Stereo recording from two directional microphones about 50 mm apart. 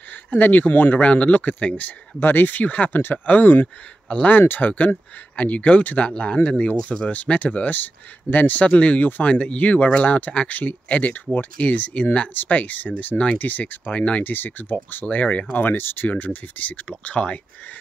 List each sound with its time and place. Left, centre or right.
0.3 s speech: left
8.6 s speech: left
14.2 s speech: left
15.0 s speech: left
15.5 s speech: left